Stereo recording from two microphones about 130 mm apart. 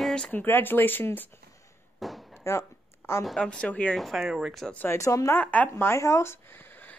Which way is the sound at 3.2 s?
5° left (ahead or behind).